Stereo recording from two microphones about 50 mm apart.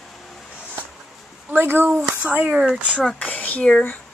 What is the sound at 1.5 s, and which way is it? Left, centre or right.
Speech, right.